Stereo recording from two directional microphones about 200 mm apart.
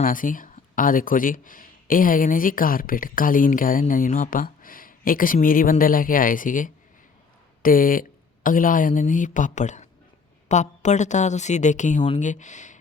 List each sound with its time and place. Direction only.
0.0 s a woman's voice: 45° left (ahead or behind)